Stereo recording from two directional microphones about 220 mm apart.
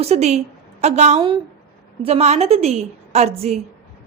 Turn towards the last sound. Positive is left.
turn(degrees=-30)  # may be behind; listen again after turning